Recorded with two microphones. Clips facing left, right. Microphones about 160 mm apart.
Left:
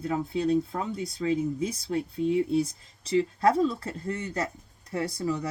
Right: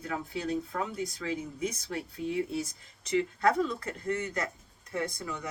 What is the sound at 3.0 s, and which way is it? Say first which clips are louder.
Speech: left 4 dB; 30° left (ahead or behind).